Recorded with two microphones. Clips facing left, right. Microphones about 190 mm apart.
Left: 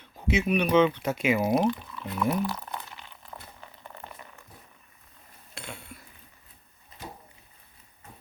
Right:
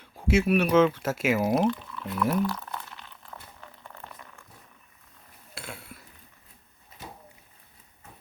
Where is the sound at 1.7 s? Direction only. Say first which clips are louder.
Right 1 dB; 10° left (ahead or behind).